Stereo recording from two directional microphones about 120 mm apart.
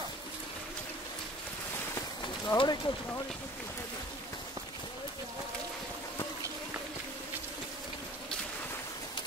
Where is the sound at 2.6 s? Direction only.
40° left (ahead or behind).